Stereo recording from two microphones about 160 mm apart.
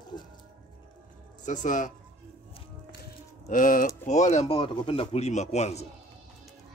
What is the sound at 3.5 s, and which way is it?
Speech, 55° left (ahead or behind).